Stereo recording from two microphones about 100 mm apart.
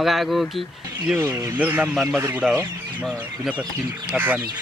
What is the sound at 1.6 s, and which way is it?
Speech, 15° right (ahead or behind).